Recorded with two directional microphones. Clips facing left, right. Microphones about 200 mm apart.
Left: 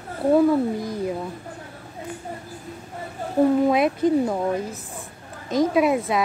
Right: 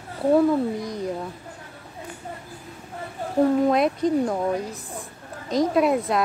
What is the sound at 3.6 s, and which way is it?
Speech, 5° left (ahead or behind).